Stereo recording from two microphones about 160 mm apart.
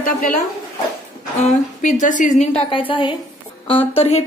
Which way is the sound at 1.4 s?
50° left (ahead or behind).